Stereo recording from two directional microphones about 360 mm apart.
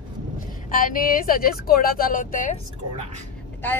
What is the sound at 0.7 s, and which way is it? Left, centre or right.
Speech, left.